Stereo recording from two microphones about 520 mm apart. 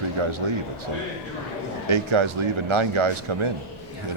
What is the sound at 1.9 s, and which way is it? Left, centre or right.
Speech, right.